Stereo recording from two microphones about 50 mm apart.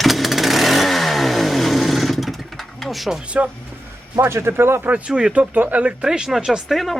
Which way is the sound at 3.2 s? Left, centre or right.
Right.